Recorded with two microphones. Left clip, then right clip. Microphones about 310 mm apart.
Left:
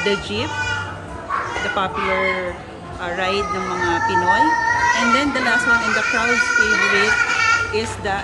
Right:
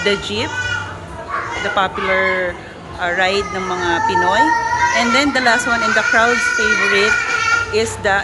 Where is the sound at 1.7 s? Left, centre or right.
Centre.